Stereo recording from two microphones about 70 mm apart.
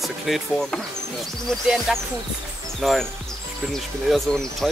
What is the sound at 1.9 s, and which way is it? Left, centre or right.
Speech, centre.